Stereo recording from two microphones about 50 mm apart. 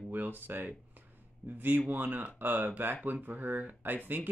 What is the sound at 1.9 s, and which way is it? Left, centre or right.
Speech, right.